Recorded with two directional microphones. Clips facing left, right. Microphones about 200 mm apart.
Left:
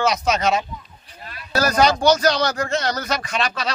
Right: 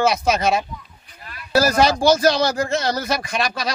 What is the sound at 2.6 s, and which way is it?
Speech, 10° right (ahead or behind).